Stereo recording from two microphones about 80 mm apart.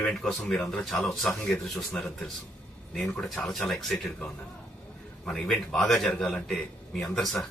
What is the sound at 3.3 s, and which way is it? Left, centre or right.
Speech, centre.